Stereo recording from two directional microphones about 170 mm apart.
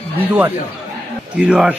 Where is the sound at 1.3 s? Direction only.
10° right (ahead or behind).